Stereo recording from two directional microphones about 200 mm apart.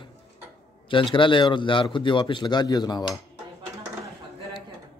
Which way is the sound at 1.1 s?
25° left (ahead or behind).